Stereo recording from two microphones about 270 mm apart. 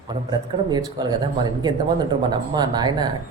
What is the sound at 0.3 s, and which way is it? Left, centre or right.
Speech, centre.